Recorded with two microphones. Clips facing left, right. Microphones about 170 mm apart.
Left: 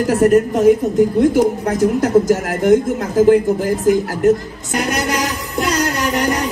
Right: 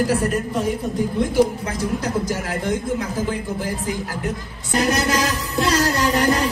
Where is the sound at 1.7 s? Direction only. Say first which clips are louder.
Left 10 dB; 45° left (ahead or behind).